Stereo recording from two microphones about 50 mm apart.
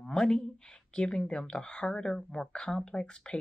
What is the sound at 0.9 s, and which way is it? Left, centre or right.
Speech, centre.